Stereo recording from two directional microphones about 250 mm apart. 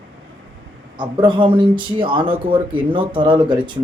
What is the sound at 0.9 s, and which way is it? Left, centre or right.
A man's voice, centre.